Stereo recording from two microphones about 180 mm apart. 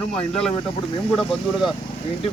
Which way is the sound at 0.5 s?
25° left (ahead or behind).